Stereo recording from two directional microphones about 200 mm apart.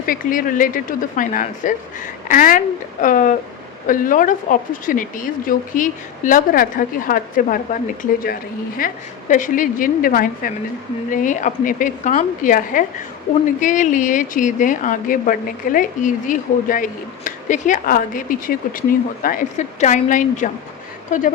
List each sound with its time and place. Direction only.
0.0 s speech: 45° left (ahead or behind)
8.8 s speech: 45° left (ahead or behind)